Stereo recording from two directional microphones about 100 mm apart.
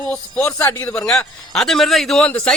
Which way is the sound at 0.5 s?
25° left (ahead or behind).